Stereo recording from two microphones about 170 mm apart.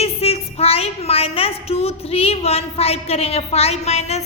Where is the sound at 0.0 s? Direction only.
35° left (ahead or behind).